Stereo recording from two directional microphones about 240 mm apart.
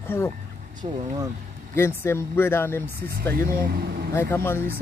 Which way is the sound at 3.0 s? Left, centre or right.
Right.